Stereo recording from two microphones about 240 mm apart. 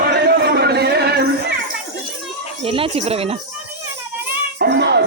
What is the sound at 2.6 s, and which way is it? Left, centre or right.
Speech, right.